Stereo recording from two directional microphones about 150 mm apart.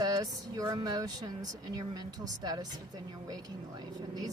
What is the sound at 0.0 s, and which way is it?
Speech, 25° right (ahead or behind).